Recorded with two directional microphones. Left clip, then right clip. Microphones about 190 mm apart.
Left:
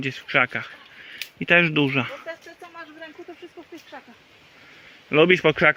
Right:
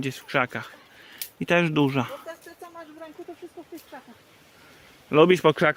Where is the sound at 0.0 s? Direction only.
10° right (ahead or behind).